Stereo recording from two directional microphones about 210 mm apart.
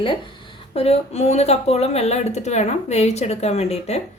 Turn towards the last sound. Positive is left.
turn(degrees=30)  # may be behind; listen again after turning